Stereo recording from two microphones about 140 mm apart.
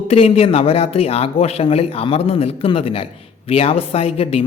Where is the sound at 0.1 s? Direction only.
45° left (ahead or behind).